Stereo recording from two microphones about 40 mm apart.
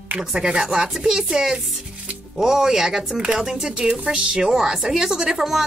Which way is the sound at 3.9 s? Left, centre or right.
Right.